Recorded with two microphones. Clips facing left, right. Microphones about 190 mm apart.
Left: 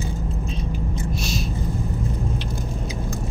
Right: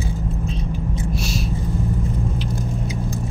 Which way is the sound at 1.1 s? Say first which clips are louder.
Right 2 dB; 5° right (ahead or behind).